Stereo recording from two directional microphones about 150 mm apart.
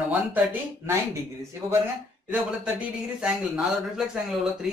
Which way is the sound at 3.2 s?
5° right (ahead or behind).